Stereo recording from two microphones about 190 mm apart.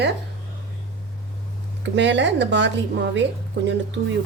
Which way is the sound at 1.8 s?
70° right (ahead or behind).